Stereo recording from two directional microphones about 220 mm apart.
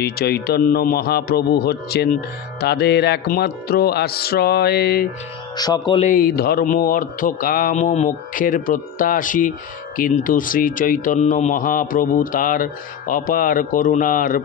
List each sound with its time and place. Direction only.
0.0 s music: 45° left (ahead or behind)
5.6 s speech: 20° left (ahead or behind)
6.0 s speech: 40° left (ahead or behind)